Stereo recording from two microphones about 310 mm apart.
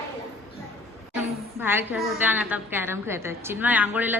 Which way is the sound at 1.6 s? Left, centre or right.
Centre.